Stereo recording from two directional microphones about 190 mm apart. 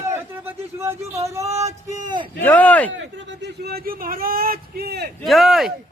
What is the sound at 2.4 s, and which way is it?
Speech, 10° left (ahead or behind).